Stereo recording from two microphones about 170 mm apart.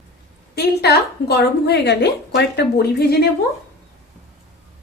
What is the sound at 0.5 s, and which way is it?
A woman's voice, 70° left (ahead or behind).